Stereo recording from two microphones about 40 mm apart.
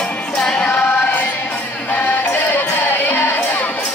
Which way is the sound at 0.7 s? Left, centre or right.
Left.